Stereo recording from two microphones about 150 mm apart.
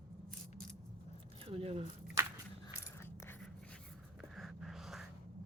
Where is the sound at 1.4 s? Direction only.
40° right (ahead or behind).